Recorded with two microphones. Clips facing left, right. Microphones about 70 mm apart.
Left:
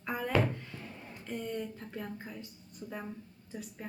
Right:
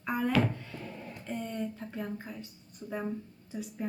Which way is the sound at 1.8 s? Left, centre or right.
Centre.